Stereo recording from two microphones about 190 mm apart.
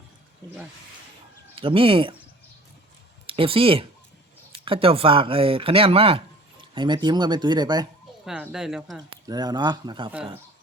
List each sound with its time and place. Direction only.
1.5 s speech: 30° right (ahead or behind)
3.2 s speech: 30° right (ahead or behind)
8.2 s speech: 5° right (ahead or behind)
9.0 s speech: 20° right (ahead or behind)